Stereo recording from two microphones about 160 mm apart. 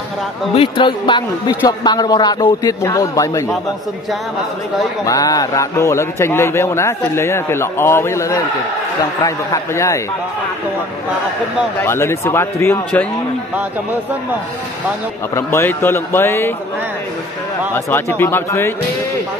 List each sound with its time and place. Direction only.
0.6 s a man's voice: 35° left (ahead or behind)
5.0 s a man's voice: 20° left (ahead or behind)
11.8 s a man's voice: 15° left (ahead or behind)
15.3 s a man's voice: 15° left (ahead or behind)
17.7 s a man's voice: 15° left (ahead or behind)